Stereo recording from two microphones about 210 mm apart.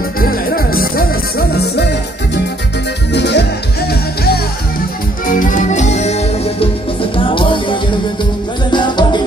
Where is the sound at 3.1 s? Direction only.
50° left (ahead or behind).